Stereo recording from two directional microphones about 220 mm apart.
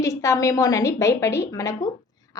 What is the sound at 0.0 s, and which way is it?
A woman's voice, 15° left (ahead or behind).